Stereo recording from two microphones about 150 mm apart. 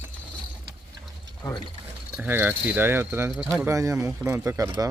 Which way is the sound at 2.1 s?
10° right (ahead or behind).